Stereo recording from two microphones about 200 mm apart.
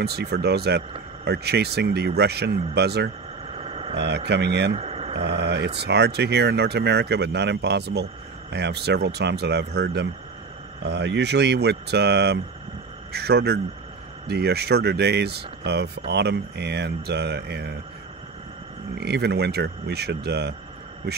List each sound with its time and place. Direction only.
0.0 s speech: 55° right (ahead or behind)
3.5 s a sound: 30° right (ahead or behind)
3.9 s speech: 60° right (ahead or behind)
4.7 s a sound: 30° right (ahead or behind)
5.2 s speech: 55° right (ahead or behind)
18.9 s speech: 55° right (ahead or behind)